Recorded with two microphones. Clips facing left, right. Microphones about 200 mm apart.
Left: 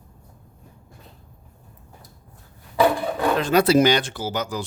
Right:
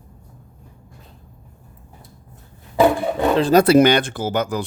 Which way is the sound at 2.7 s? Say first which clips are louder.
Right 4 dB; 25° right (ahead or behind).